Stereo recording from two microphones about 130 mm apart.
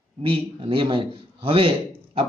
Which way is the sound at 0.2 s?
45° right (ahead or behind).